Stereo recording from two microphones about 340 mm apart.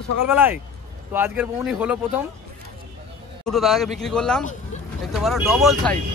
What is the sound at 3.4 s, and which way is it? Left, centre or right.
Speech, centre.